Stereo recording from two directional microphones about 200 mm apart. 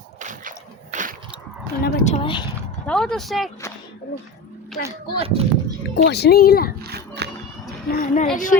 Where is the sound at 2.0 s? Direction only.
30° left (ahead or behind).